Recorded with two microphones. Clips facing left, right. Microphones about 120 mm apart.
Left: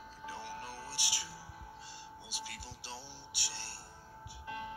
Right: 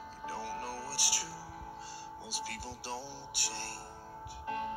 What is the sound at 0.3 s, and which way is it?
Music, 40° right (ahead or behind).